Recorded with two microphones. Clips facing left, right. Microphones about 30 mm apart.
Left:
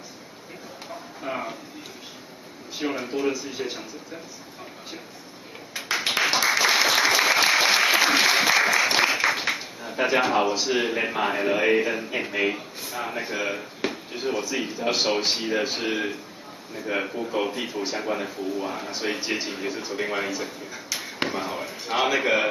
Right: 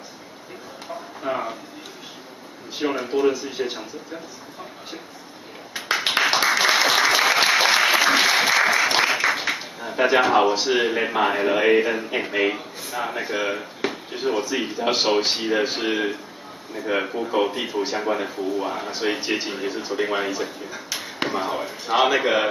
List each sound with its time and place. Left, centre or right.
1.2 s speech: centre
2.8 s speech: centre
5.7 s a sound: centre
6.6 s applause: centre
9.8 s speech: centre